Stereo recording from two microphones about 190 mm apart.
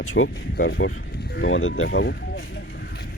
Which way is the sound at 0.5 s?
60° left (ahead or behind).